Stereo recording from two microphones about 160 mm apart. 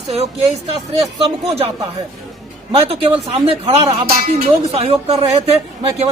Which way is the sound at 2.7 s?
35° right (ahead or behind).